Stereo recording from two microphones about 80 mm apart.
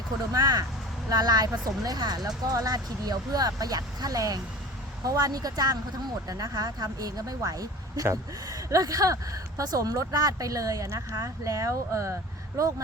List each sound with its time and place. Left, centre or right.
0.3 s speech: right